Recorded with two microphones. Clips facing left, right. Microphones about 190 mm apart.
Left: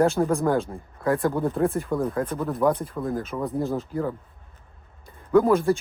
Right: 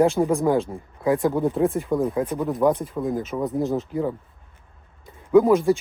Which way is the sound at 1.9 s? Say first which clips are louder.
Right 3 dB; 15° right (ahead or behind).